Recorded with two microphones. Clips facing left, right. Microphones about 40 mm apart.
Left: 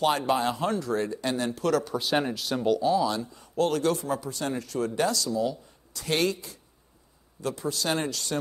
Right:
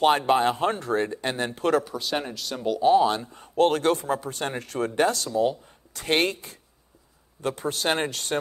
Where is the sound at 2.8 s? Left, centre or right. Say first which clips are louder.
Right 5 dB; right.